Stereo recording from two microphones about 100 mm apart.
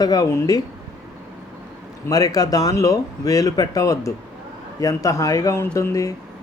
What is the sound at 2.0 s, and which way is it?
Speech, 40° left (ahead or behind).